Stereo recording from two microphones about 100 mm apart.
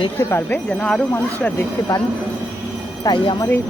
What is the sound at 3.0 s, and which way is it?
Speech, 40° left (ahead or behind).